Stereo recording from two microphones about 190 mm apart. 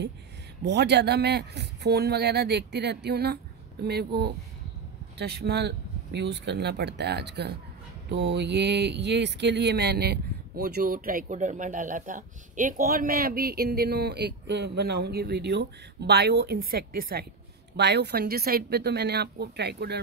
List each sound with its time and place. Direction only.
0.7 s speech: 60° right (ahead or behind)
17.7 s speech: 65° right (ahead or behind)